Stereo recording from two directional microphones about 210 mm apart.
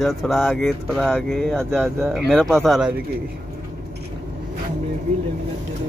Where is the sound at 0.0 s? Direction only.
Centre (ahead or behind).